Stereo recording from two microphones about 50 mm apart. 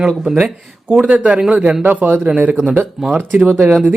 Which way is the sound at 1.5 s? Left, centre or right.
Right.